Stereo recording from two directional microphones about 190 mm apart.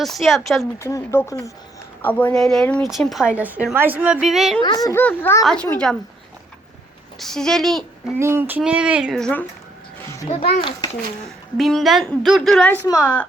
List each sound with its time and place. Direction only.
0.0 s speech: centre (ahead or behind)
0.8 s speech: 15° left (ahead or behind); by 4.6 s centre (ahead or behind)
4.9 s speech: 10° left (ahead or behind)
5.4 s speech: centre (ahead or behind)
7.2 s speech: centre (ahead or behind)
8.2 s speech: 10° right (ahead or behind); by 9.5 s 5° left (ahead or behind)
10.2 s a child's voice: 30° left (ahead or behind)
11.5 s speech: centre (ahead or behind)
12.8 s speech: 15° left (ahead or behind)